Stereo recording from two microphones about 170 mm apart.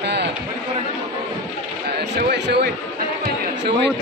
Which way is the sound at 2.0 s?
75° right (ahead or behind).